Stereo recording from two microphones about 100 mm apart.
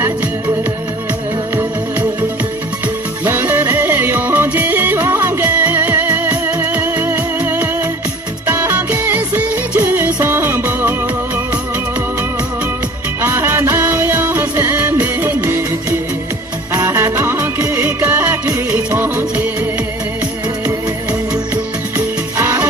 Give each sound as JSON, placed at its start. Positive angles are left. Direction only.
{"t": 3.2, "sound": "music", "side_deg": -20}
{"t": 13.2, "sound": "music", "side_deg": -25}
{"t": 16.7, "sound": "music", "side_deg": -30}
{"t": 21.1, "sound": "music", "side_deg": -20}